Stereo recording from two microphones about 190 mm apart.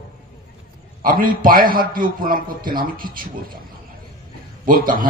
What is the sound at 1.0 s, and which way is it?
A man's voice, 50° right (ahead or behind).